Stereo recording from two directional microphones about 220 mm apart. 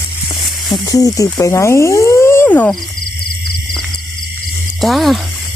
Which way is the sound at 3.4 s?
Centre (ahead or behind).